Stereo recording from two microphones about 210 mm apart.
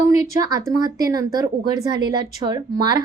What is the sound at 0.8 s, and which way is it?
Speech, 15° right (ahead or behind).